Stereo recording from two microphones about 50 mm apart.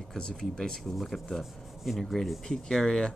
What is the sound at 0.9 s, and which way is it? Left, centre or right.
Speech, centre.